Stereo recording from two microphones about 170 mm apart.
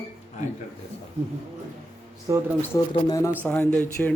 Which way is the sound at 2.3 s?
15° right (ahead or behind).